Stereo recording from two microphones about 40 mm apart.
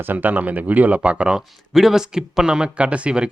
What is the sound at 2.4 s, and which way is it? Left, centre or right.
Speech, right.